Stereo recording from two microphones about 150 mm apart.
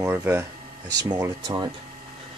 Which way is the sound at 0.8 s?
25° right (ahead or behind).